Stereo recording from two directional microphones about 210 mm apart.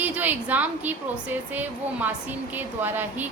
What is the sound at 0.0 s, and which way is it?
A woman's voice, 10° right (ahead or behind).